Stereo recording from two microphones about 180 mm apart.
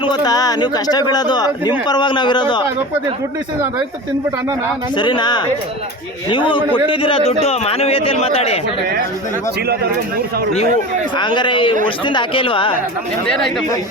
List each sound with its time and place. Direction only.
0.0 s speech: 20° left (ahead or behind)
4.9 s speech: 25° left (ahead or behind)
11.2 s speech: 25° left (ahead or behind)
13.2 s speech: 5° left (ahead or behind)